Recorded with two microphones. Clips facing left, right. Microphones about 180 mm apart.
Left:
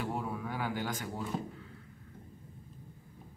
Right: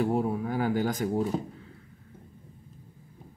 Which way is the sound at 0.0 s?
40° right (ahead or behind).